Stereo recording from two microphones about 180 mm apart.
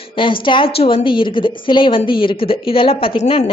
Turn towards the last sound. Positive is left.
turn(degrees=30)  # may be behind; listen again after turning